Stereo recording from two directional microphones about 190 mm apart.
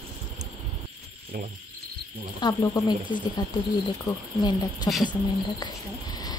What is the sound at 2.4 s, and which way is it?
Speech, 20° left (ahead or behind).